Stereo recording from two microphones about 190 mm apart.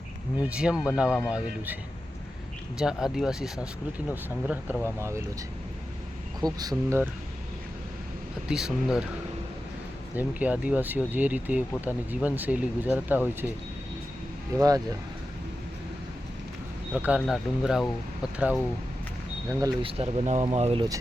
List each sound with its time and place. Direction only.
0.4 s speech: 5° right (ahead or behind)
6.4 s speech: 20° right (ahead or behind)
8.4 s speech: 5° right (ahead or behind)
10.2 s speech: 5° right (ahead or behind)
16.9 s speech: 5° right (ahead or behind)
19.5 s speech: 20° right (ahead or behind)